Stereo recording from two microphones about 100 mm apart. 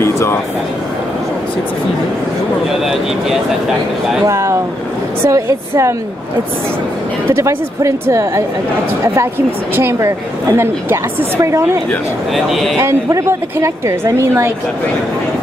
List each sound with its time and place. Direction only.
0.0 s a sound: 25° left (ahead or behind)
2.8 s speech: 5° right (ahead or behind)
4.3 s a woman's voice: 30° right (ahead or behind)
7.2 s a woman's voice: 30° right (ahead or behind)
12.4 s speech: centre (ahead or behind)
12.7 s a woman's voice: 30° right (ahead or behind)